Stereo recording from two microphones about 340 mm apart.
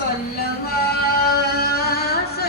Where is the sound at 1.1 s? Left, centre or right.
Left.